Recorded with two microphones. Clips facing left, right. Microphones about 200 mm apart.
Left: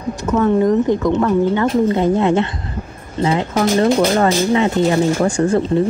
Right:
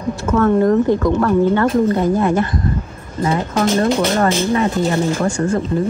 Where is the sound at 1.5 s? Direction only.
50° right (ahead or behind).